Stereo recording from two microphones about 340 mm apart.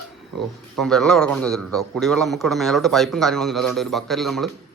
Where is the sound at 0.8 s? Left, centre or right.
Centre.